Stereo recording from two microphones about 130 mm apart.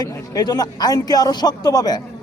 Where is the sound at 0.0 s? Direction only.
30° left (ahead or behind).